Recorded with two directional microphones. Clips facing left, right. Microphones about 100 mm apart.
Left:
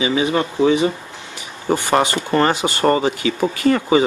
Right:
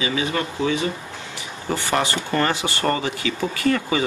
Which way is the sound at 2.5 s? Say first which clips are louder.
Left 6 dB; 20° left (ahead or behind).